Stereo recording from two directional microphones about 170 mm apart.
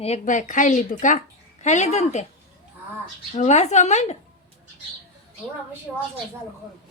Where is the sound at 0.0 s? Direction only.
45° left (ahead or behind).